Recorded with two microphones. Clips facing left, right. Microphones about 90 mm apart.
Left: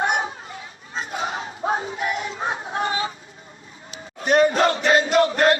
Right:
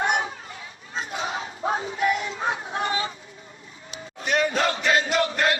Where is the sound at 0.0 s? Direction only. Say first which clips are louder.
Left 2 dB; 30° left (ahead or behind).